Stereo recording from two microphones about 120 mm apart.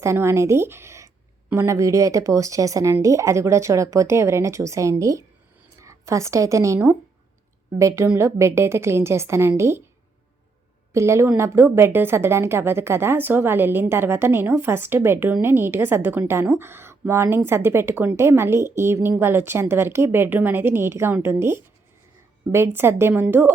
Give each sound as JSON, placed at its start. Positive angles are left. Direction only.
{"t": 0.0, "sound": "a woman's voice", "side_deg": -25}
{"t": 10.9, "sound": "a woman's voice", "side_deg": -25}